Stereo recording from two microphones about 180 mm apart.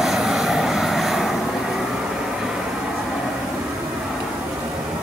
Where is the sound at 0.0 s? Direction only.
Centre (ahead or behind).